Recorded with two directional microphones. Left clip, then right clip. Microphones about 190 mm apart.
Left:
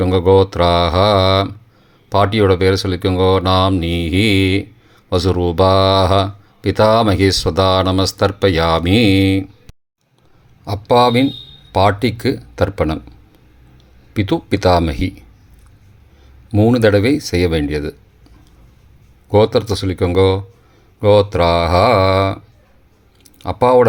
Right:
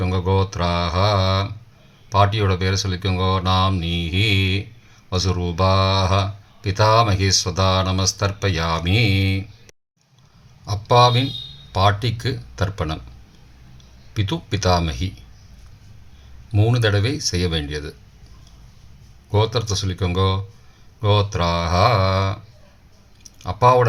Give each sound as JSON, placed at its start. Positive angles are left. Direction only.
{"t": 0.0, "sound": "speech", "side_deg": 50}
{"t": 10.7, "sound": "speech", "side_deg": 40}
{"t": 14.1, "sound": "speech", "side_deg": 40}
{"t": 16.5, "sound": "speech", "side_deg": 40}
{"t": 19.3, "sound": "speech", "side_deg": 40}
{"t": 23.4, "sound": "speech", "side_deg": 45}